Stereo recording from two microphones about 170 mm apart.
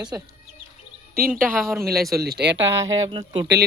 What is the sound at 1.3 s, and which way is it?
Speech, centre (ahead or behind).